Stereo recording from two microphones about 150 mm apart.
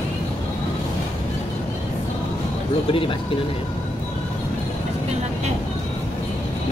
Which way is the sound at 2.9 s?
35° left (ahead or behind).